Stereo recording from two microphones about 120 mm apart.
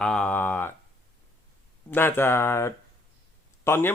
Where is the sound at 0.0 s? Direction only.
10° left (ahead or behind).